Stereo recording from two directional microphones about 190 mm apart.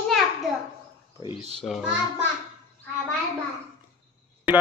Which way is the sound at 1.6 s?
5° right (ahead or behind).